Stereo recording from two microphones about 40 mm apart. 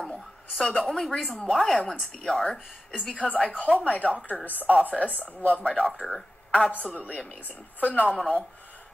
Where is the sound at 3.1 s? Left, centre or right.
Left.